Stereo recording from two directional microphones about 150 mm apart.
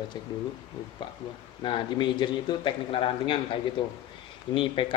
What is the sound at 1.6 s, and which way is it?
Speech, 35° left (ahead or behind).